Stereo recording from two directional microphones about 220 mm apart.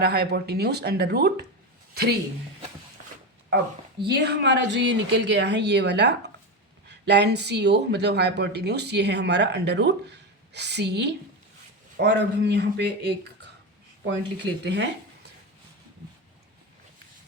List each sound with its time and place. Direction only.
0.0 s speech: 45° right (ahead or behind)
4.0 s speech: 50° right (ahead or behind)
14.0 s speech: 50° right (ahead or behind)